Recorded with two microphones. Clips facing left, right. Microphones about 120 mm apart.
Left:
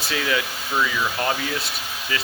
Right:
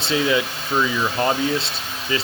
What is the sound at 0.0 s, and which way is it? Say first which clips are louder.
Speech: right 5 dB; 25° right (ahead or behind).